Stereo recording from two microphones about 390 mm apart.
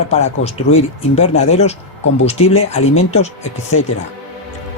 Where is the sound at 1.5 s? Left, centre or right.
Centre.